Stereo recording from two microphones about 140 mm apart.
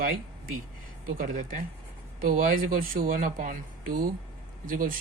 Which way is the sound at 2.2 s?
80° right.